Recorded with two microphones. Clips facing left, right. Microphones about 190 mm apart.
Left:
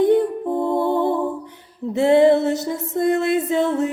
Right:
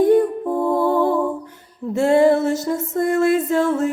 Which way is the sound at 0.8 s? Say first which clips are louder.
Right 3 dB; 20° left (ahead or behind).